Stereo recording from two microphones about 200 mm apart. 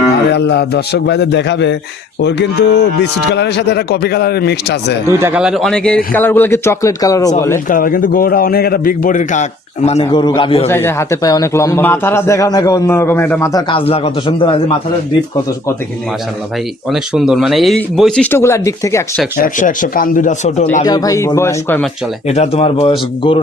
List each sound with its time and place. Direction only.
0.3 s a man's voice: 55° left (ahead or behind)
5.0 s a man's voice: 10° right (ahead or behind); by 7.6 s 15° left (ahead or behind)
7.7 s a man's voice: 45° left (ahead or behind); by 10.7 s 25° left (ahead or behind)
10.7 s a man's voice: 10° left (ahead or behind)
16.9 s speech: centre (ahead or behind); by 19.2 s 15° left (ahead or behind)
19.4 s speech: 40° left (ahead or behind)
20.8 s a man's voice: 20° left (ahead or behind)
22.3 s speech: 30° left (ahead or behind)